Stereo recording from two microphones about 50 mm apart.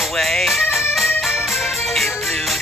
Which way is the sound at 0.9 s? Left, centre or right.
Centre.